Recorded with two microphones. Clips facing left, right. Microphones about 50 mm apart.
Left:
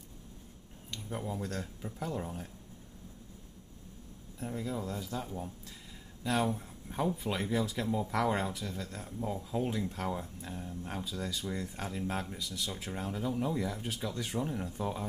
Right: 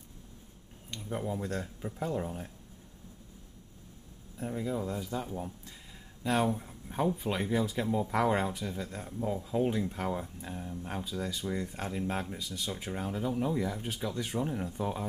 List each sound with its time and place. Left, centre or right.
0.9 s speech: centre
4.4 s speech: centre